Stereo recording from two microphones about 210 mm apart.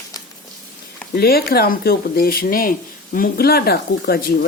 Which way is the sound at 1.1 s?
45° left (ahead or behind).